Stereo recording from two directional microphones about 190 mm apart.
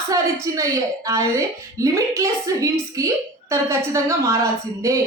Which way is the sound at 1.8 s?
15° right (ahead or behind).